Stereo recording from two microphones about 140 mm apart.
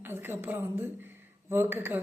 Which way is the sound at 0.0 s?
15° right (ahead or behind).